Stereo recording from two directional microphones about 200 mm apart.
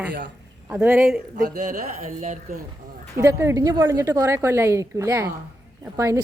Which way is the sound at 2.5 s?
45° right (ahead or behind).